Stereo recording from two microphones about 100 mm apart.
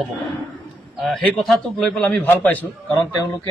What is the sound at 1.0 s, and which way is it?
Speech, centre (ahead or behind).